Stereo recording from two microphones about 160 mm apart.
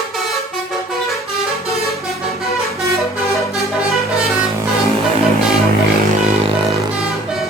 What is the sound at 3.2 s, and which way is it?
Vehicle, centre (ahead or behind).